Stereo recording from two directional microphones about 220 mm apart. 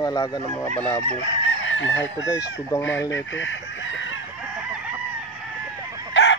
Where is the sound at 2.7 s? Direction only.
15° left (ahead or behind).